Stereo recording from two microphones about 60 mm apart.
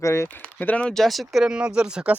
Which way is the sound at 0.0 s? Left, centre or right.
Left.